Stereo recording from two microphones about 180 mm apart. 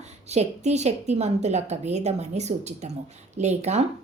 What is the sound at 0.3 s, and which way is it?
A woman's voice, 40° right (ahead or behind).